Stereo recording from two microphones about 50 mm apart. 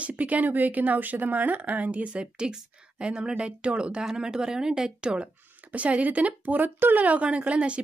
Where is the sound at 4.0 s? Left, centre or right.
Centre.